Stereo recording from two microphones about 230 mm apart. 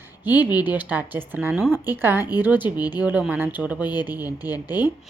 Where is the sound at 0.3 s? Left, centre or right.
Centre.